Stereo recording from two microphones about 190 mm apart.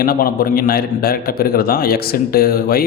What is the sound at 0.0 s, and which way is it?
A man's voice, 50° left (ahead or behind).